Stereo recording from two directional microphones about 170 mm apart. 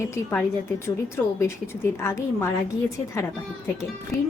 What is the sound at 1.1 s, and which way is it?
A woman's voice, 15° left (ahead or behind).